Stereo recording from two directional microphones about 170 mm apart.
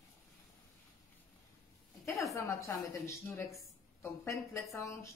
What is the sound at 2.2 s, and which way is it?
Speech, 20° left (ahead or behind).